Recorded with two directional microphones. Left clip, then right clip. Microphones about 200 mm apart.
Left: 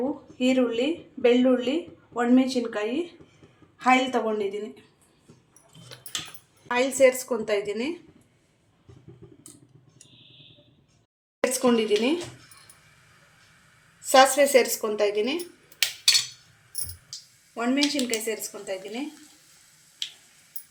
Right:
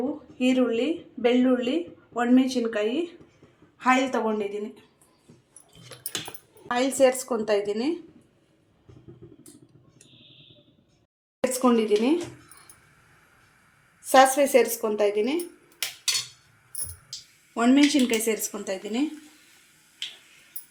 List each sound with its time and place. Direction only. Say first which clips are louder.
0.3 s speech: even; centre (ahead or behind)
6.7 s a woman's voice: left 1 dB; 10° right (ahead or behind)
11.3 s speech: even; 5° right (ahead or behind)
14.1 s speech: even; 5° right (ahead or behind)
17.5 s speech: right 5 dB; 40° right (ahead or behind)